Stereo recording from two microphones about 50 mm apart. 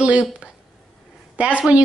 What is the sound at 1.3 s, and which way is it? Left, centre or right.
Speech, right.